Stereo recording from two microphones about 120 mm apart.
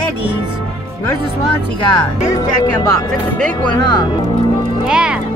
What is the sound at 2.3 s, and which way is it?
Speech, 30° left (ahead or behind).